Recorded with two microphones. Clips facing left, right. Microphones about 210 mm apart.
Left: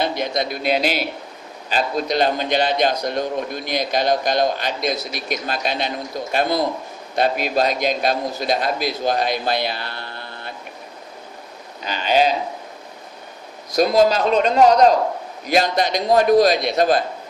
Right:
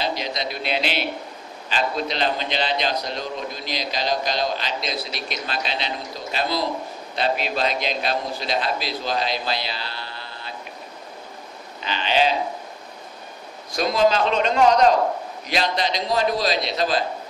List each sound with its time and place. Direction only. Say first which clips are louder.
0.0 s a man's voice: left 5 dB; 55° left (ahead or behind)
11.8 s a man's voice: left 3 dB; 45° left (ahead or behind)
13.7 s a man's voice: left 4 dB; 40° left (ahead or behind)